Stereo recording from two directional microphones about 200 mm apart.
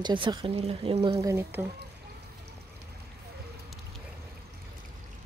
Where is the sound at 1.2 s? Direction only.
15° right (ahead or behind).